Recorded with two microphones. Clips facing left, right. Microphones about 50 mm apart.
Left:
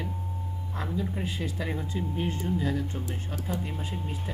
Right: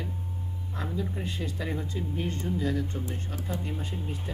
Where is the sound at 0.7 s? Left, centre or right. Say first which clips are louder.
Left 1 dB; centre.